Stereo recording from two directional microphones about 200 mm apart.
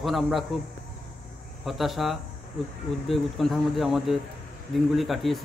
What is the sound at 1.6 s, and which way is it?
Speech, centre (ahead or behind).